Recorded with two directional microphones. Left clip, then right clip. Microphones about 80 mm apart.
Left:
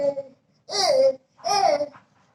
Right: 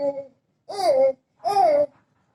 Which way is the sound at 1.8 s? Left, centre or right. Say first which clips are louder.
Right 4 dB; right.